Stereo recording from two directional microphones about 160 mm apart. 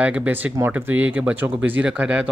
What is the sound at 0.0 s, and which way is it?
Speech, 10° right (ahead or behind).